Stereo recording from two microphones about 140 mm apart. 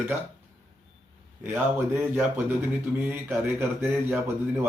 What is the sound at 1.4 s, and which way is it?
A man's voice, 15° right (ahead or behind).